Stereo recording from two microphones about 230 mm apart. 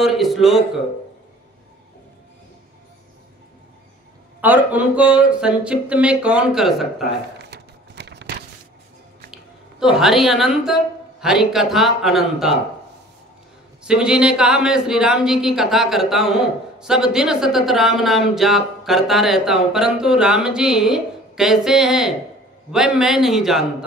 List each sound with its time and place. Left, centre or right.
0.0 s speech: centre
4.4 s speech: centre
7.3 s a sound: right
9.3 s a woman's voice: centre
13.8 s speech: centre